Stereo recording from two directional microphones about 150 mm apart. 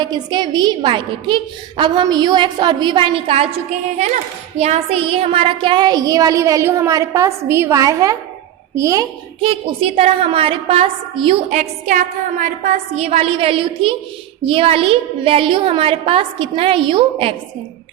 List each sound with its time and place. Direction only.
0.0 s a woman's voice: 30° right (ahead or behind)
4.5 s speech: 45° right (ahead or behind); by 9.0 s 20° right (ahead or behind)
9.4 s a woman's voice: 40° right (ahead or behind)